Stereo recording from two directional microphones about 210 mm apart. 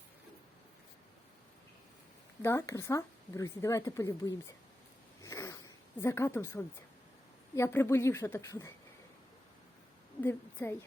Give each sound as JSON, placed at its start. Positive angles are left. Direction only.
{"t": 2.4, "sound": "a woman's voice", "side_deg": 15}
{"t": 5.2, "sound": "a sound", "side_deg": 15}
{"t": 6.0, "sound": "a woman's voice", "side_deg": 15}
{"t": 10.2, "sound": "a woman's voice", "side_deg": 10}